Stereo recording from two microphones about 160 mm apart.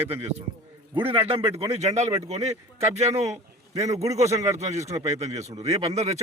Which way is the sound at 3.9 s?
20° right (ahead or behind).